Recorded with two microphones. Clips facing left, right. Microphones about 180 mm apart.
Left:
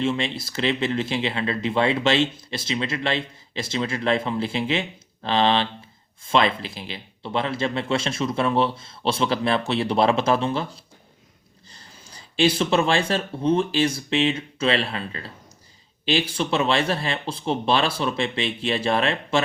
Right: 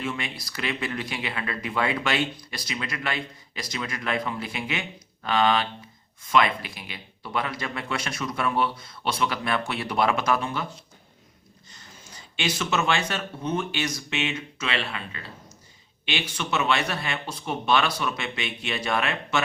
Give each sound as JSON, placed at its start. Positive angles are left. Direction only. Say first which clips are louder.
{"t": 0.0, "sound": "speech", "louder": "left 7 dB", "side_deg": 25}
{"t": 11.7, "sound": "speech", "louder": "left 1 dB", "side_deg": 30}